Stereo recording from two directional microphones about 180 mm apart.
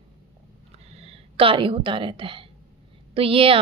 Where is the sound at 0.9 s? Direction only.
35° right (ahead or behind).